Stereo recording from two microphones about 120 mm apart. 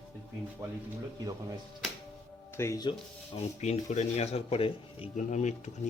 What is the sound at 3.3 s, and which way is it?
Speech, 70° left (ahead or behind).